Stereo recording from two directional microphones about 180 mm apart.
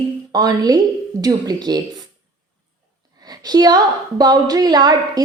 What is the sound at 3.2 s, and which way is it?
A woman's voice, 20° right (ahead or behind).